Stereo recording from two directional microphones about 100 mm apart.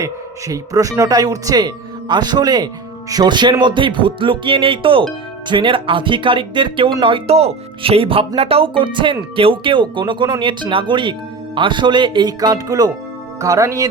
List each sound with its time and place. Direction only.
0.0 s speech: 35° right (ahead or behind); by 6.9 s 60° right (ahead or behind)
7.0 s speech: 75° right (ahead or behind)
8.4 s speech: 75° right (ahead or behind); by 13.8 s 30° right (ahead or behind)